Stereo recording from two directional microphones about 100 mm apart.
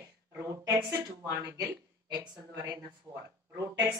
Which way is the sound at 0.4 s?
35° right (ahead or behind).